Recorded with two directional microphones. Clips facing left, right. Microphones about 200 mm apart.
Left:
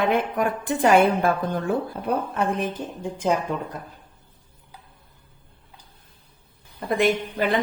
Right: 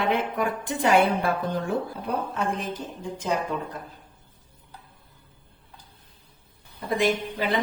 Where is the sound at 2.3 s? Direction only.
55° left (ahead or behind).